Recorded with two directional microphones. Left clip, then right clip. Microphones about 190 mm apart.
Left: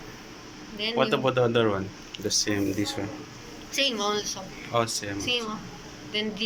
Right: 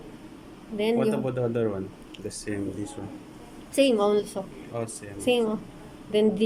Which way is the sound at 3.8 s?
50° right (ahead or behind).